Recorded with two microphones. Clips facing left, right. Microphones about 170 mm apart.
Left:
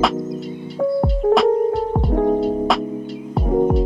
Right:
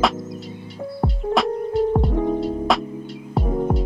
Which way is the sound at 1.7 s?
Centre (ahead or behind).